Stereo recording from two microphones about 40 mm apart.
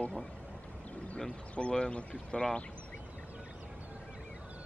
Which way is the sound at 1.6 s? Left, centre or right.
Left.